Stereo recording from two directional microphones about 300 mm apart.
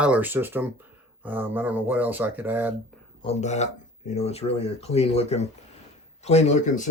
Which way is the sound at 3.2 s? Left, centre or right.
Left.